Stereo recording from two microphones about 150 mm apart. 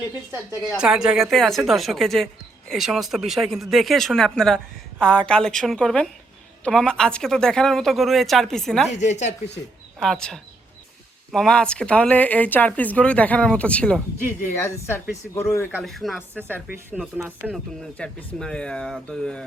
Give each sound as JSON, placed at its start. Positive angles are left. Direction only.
{"t": 0.8, "sound": "speech", "side_deg": -5}
{"t": 8.9, "sound": "speech", "side_deg": 50}
{"t": 10.0, "sound": "speech", "side_deg": 5}
{"t": 15.8, "sound": "speech", "side_deg": 0}
{"t": 17.9, "sound": "speech", "side_deg": 5}